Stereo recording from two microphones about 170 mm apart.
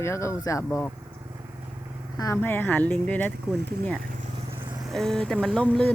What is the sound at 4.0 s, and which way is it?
Vehicle, 50° right (ahead or behind).